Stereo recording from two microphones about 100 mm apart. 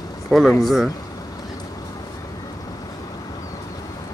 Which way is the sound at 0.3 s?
Centre (ahead or behind).